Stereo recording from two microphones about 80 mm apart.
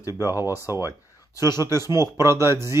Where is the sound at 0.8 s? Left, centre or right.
Left.